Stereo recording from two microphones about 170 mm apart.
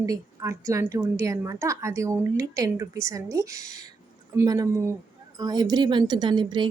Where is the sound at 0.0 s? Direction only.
20° right (ahead or behind).